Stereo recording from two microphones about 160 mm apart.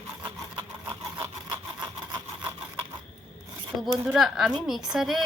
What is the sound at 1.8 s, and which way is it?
Sawing, 25° right (ahead or behind).